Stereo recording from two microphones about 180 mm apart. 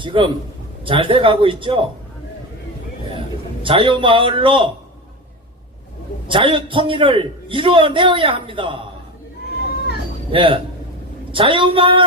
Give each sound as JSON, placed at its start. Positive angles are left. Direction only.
{"t": 0.0, "sound": "a man's voice", "side_deg": -25}
{"t": 3.2, "sound": "a man's voice", "side_deg": -30}
{"t": 6.2, "sound": "a man's voice", "side_deg": -30}
{"t": 10.3, "sound": "a man's voice", "side_deg": -30}